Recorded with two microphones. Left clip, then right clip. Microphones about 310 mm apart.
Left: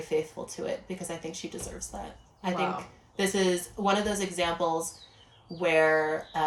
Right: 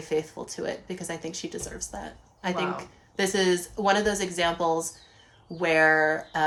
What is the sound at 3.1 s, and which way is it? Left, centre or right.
A woman's voice, centre.